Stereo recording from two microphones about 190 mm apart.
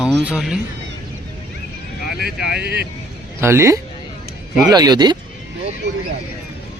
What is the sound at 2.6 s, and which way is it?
Speech, 60° right (ahead or behind).